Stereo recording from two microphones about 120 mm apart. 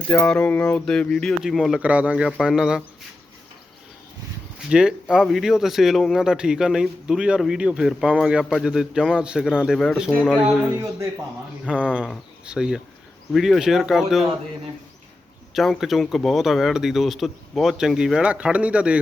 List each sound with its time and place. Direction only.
0.1 s speech: 10° left (ahead or behind)
1.8 s speech: 10° right (ahead or behind)
4.7 s speech: 5° right (ahead or behind)
10.7 s speech: 25° right (ahead or behind)
11.6 s speech: 10° right (ahead or behind)
15.5 s speech: centre (ahead or behind)